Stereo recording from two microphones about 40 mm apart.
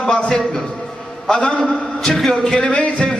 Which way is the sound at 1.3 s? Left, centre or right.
Left.